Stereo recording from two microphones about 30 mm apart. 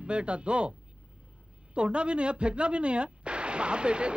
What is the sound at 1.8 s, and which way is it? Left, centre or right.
Speech, right.